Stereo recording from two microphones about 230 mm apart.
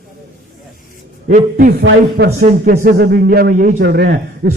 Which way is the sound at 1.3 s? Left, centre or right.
Right.